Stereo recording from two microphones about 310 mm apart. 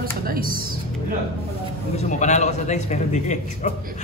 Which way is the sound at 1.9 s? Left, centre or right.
Left.